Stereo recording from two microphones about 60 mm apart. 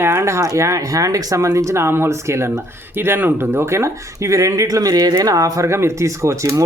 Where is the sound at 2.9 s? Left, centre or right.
Right.